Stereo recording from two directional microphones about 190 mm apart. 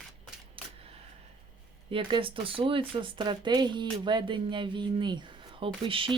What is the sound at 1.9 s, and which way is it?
Speech, 30° right (ahead or behind).